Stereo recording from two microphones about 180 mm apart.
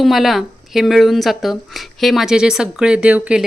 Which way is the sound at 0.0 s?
Centre (ahead or behind).